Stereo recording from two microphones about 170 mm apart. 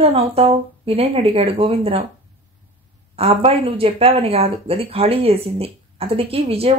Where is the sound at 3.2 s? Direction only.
35° right (ahead or behind).